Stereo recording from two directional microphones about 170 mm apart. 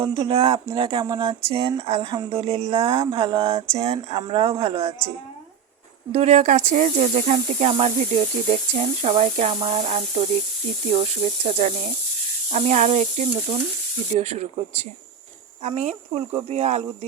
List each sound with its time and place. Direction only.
0.0 s speech: 30° right (ahead or behind)
6.1 s speech: 40° right (ahead or behind)
11.4 s speech: 40° right (ahead or behind)
15.6 s speech: 40° right (ahead or behind)